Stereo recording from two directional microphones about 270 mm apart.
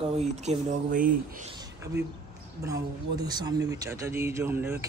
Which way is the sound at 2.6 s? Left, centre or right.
Centre.